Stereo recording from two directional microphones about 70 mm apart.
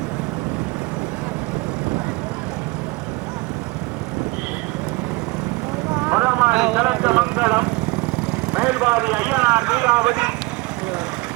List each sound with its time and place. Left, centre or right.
6.1 s vehicle: right
6.5 s vehicle: centre
8.6 s a sound: centre